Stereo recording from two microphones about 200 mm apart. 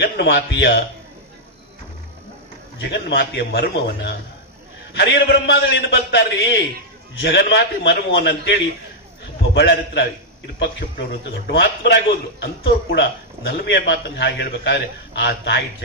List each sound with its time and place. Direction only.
0.0 s a man's voice: 55° left (ahead or behind)
2.7 s a man's voice: 60° left (ahead or behind)